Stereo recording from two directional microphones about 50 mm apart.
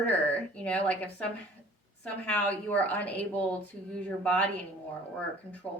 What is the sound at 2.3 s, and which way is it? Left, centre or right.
A woman's voice, left.